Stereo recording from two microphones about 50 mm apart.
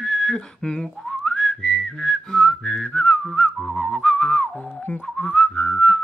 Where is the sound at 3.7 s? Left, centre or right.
Centre.